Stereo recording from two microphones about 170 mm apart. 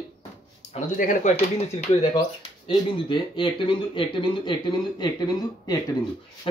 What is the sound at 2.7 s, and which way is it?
Speech, 30° left (ahead or behind).